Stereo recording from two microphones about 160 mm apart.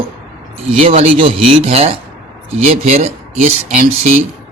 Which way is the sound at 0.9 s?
35° right (ahead or behind).